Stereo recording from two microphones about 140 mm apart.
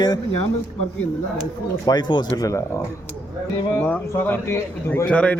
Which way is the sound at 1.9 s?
30° left (ahead or behind).